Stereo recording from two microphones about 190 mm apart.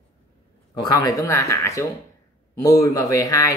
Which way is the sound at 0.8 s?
20° left (ahead or behind).